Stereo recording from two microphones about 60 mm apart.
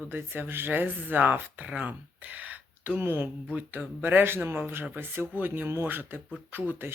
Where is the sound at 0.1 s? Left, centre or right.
Right.